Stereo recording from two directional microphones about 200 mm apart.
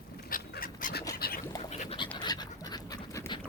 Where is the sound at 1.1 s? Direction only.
50° left (ahead or behind).